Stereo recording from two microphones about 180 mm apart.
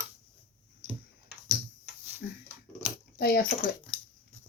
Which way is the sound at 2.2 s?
70° left (ahead or behind).